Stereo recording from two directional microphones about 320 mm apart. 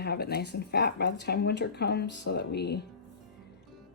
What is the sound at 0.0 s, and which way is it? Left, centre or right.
Speech, left.